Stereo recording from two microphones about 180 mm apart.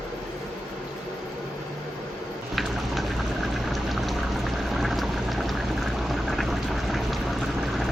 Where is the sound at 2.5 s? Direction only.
Centre (ahead or behind).